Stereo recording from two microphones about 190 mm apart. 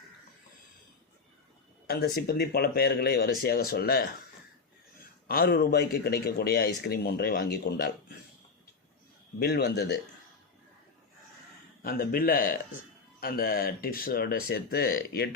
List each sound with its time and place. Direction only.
1.9 s speech: 55° left (ahead or behind)
5.3 s a man's voice: 50° left (ahead or behind)
9.4 s speech: 60° left (ahead or behind)
11.8 s a man's voice: 50° left (ahead or behind)